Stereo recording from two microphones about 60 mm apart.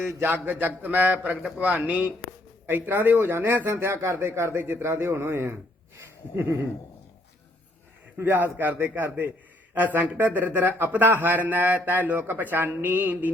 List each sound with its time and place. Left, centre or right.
0.0 s a man's voice: right
0.8 s a man's voice: right
8.2 s a man's voice: right